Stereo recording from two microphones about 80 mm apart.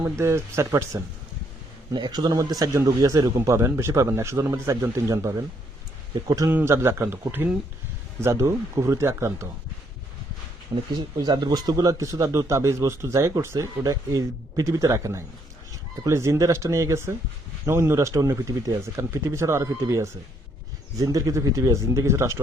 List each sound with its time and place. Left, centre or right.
0.0 s speech: right
1.9 s speech: right
6.5 s speech: right
10.9 s speech: right
21.0 s speech: right